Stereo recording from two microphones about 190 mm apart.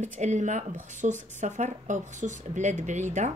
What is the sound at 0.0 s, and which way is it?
Speech, 40° right (ahead or behind).